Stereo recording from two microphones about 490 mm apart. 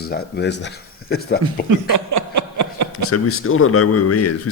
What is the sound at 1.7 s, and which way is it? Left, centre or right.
Chuckle, right.